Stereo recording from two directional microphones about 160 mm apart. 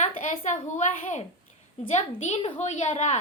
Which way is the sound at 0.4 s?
50° left (ahead or behind).